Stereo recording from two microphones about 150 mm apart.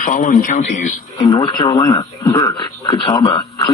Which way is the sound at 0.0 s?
60° left (ahead or behind).